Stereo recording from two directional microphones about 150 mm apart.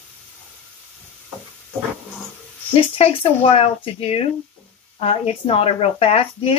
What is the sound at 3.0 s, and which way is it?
Speech, 40° left (ahead or behind).